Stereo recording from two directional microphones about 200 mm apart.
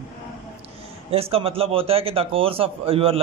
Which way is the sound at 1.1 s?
30° right (ahead or behind).